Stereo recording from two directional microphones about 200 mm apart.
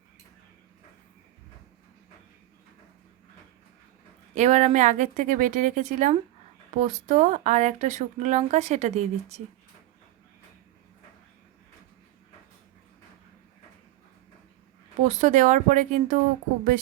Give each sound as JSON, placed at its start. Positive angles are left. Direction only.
{"t": 4.4, "sound": "speech", "side_deg": -35}
{"t": 15.0, "sound": "speech", "side_deg": -35}